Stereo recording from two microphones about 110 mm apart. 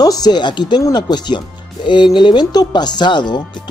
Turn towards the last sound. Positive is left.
turn(degrees=45)  # may be behind; listen again after turning